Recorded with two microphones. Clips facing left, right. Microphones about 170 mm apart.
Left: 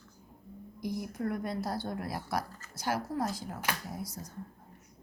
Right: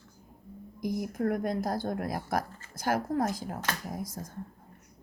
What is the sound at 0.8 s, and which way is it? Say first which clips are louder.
Speech: right 5 dB; 50° right (ahead or behind).